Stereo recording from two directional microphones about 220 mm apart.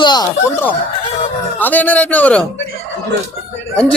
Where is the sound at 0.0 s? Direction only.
20° left (ahead or behind).